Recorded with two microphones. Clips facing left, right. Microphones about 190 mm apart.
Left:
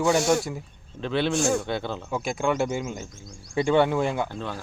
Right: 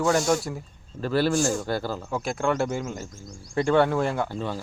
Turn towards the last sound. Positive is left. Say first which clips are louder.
# right 1 dB
turn(degrees=-10)  # may be behind; listen again after turning